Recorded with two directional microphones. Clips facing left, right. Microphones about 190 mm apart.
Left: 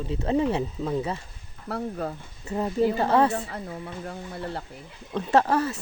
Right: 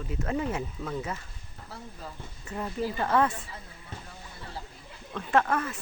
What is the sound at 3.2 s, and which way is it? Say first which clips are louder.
Speech: left 8 dB; 70° left (ahead or behind).